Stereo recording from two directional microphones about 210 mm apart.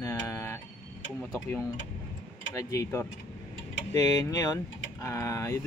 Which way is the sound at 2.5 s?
15° left (ahead or behind).